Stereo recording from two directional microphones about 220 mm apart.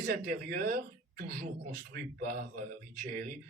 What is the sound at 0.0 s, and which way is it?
Speech, 40° right (ahead or behind).